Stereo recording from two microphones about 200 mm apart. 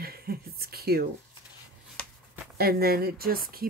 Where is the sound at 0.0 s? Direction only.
50° right (ahead or behind).